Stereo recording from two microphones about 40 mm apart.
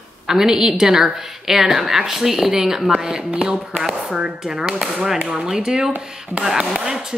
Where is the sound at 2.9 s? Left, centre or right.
Right.